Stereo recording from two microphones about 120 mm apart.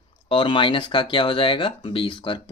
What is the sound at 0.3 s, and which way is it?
Speech, 45° left (ahead or behind).